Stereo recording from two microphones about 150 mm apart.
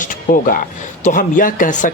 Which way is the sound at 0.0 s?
60° left (ahead or behind).